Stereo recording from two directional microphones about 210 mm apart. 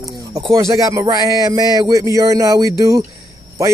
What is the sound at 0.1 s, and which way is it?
Speech, 20° right (ahead or behind).